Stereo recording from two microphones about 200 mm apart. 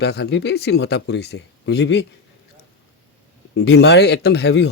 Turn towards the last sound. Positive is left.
turn(degrees=55)  # may be behind; listen again after turning